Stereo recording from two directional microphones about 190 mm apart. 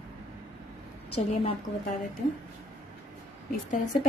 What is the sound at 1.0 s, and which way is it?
Speech, 35° left (ahead or behind).